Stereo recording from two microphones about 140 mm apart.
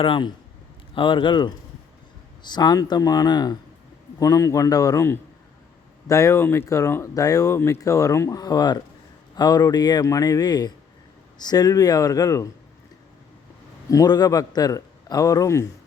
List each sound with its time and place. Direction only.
0.0 s speech: 35° left (ahead or behind)
13.9 s speech: 25° left (ahead or behind)